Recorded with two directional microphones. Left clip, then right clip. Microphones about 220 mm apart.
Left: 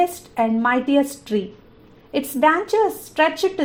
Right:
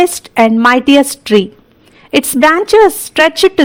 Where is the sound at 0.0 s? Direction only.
50° right (ahead or behind).